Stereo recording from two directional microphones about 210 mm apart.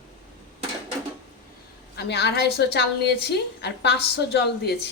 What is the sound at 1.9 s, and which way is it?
A woman's voice, 50° left (ahead or behind).